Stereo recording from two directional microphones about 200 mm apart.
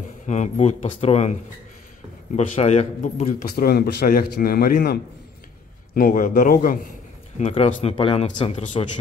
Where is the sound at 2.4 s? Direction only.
35° left (ahead or behind).